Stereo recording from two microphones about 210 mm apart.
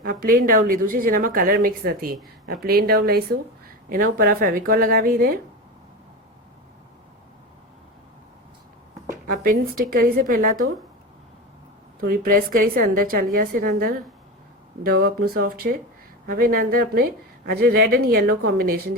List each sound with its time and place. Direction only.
0.0 s speech: 45° right (ahead or behind)
9.2 s speech: 40° right (ahead or behind)
11.9 s speech: 45° right (ahead or behind)